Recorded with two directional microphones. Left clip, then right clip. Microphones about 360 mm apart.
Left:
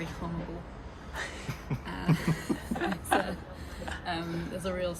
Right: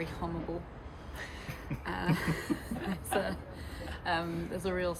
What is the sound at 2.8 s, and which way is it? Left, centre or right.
Speech, centre.